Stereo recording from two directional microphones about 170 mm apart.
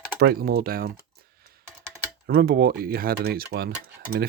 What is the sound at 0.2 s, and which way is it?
Speech, 65° right (ahead or behind).